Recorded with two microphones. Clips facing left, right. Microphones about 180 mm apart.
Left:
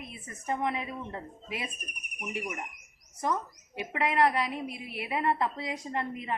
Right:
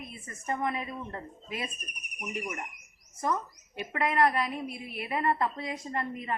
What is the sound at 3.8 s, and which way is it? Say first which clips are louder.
A woman's voice: even; 15° left (ahead or behind).